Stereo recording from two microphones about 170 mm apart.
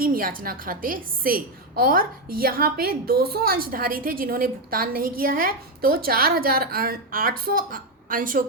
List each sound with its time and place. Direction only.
0.0 s a woman's voice: 55° right (ahead or behind)